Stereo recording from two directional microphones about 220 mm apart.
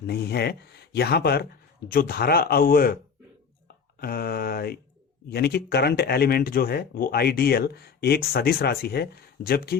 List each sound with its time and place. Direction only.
0.1 s speech: 45° left (ahead or behind)